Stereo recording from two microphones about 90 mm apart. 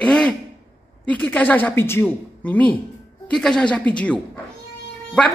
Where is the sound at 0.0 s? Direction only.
10° left (ahead or behind).